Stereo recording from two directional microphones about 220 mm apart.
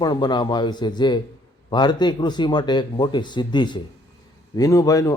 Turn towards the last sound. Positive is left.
turn(degrees=15)  # may be behind; listen again after turning